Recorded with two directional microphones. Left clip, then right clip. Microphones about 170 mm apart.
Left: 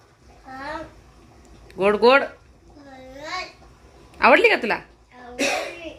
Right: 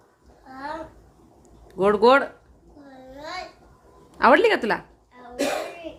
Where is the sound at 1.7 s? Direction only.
15° right (ahead or behind).